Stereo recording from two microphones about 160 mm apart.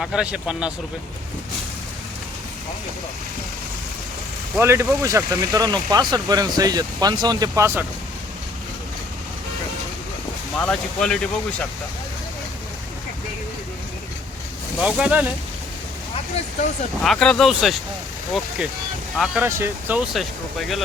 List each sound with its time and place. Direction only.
0.0 s speech: 5° right (ahead or behind)
4.5 s speech: 15° right (ahead or behind)
10.6 s speech: 5° left (ahead or behind)
14.8 s speech: 5° right (ahead or behind)
17.0 s speech: 5° left (ahead or behind)
19.1 s speech: centre (ahead or behind)
19.4 s speech: 15° right (ahead or behind); by 20.8 s centre (ahead or behind)